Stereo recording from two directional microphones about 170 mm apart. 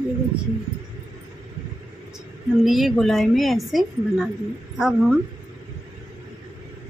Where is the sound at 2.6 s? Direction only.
Centre (ahead or behind).